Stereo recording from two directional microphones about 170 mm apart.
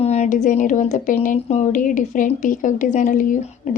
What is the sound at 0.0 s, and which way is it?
Speech, 40° left (ahead or behind).